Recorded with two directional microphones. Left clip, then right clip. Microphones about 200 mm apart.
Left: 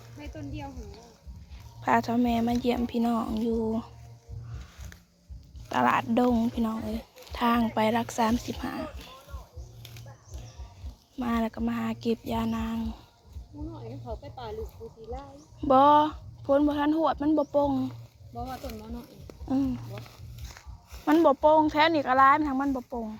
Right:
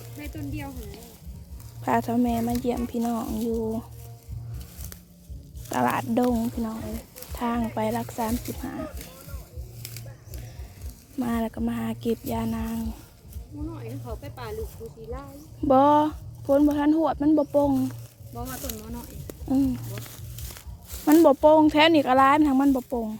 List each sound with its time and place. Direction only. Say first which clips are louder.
0.3 s speech: right 3 dB; 45° right (ahead or behind)
1.8 s speech: right 1 dB; 15° right (ahead or behind)
5.6 s speech: left 1 dB; 10° right (ahead or behind)
11.2 s speech: right 1 dB; 15° right (ahead or behind)
13.7 s speech: right 2 dB; centre (ahead or behind)
15.1 s speech: right 2 dB; 15° right (ahead or behind)
18.9 s a sound: right 5 dB; 15° right (ahead or behind)
21.0 s speech: right 4 dB; 20° right (ahead or behind)
22.9 s speech: right 6 dB; 25° right (ahead or behind)